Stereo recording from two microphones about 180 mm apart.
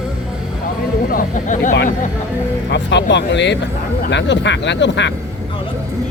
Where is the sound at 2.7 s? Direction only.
75° left (ahead or behind).